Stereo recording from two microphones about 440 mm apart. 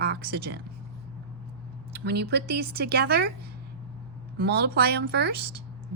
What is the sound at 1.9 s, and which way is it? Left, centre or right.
A woman's voice, right.